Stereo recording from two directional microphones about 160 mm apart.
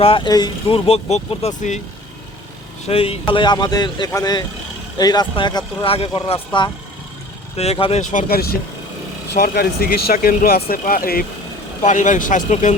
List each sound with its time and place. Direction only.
0.0 s speech: 30° left (ahead or behind)
0.9 s speech: 40° left (ahead or behind)
2.8 s speech: 40° left (ahead or behind)
8.0 s speech: 60° left (ahead or behind)
9.3 s speech: 75° left (ahead or behind)
11.8 s speech: 50° left (ahead or behind)